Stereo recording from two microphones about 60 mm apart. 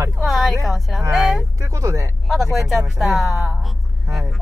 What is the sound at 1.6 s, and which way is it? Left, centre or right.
Speech, right.